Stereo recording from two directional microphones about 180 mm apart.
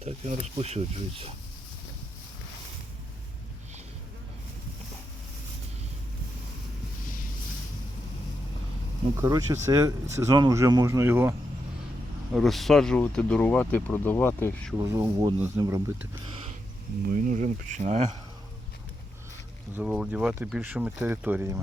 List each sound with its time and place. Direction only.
0.0 s speech: 35° right (ahead or behind)
9.2 s speech: 20° right (ahead or behind)
12.3 s speech: centre (ahead or behind)
14.8 s speech: 15° right (ahead or behind)
16.2 s a sound: 30° right (ahead or behind)
17.1 s speech: 45° right (ahead or behind)
19.7 s speech: 5° right (ahead or behind)